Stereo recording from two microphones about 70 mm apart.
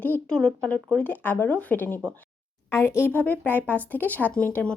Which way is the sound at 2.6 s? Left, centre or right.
Left.